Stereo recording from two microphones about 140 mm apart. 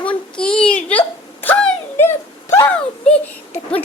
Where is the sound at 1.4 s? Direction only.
10° left (ahead or behind).